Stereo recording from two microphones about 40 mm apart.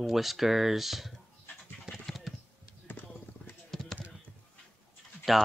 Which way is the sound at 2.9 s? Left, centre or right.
Left.